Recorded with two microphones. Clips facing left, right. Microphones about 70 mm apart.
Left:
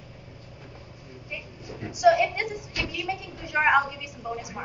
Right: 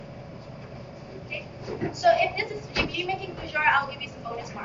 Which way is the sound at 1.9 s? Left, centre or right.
Centre.